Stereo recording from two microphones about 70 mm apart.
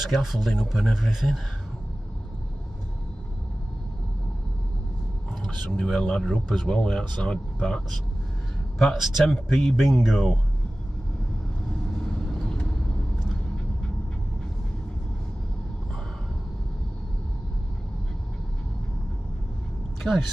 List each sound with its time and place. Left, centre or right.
0.1 s speech: centre
5.7 s speech: centre
20.1 s speech: centre